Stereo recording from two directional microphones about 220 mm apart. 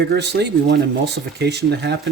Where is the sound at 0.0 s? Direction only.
50° right (ahead or behind).